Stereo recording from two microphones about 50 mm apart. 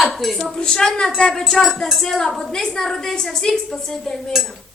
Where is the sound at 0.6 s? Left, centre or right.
Centre.